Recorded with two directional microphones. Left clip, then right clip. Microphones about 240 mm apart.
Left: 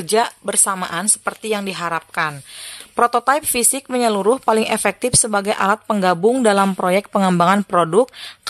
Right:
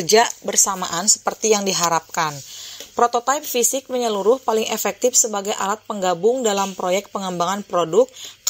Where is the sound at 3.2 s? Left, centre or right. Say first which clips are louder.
Left 2 dB; centre.